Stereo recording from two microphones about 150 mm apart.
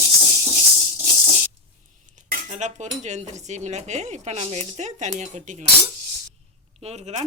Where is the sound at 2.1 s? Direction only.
55° right (ahead or behind).